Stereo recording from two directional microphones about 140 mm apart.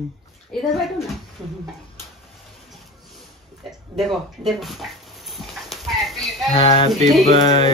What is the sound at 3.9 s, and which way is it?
Dog, centre (ahead or behind).